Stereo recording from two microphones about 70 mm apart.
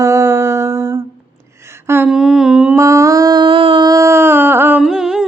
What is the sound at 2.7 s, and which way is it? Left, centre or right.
Mantra, right.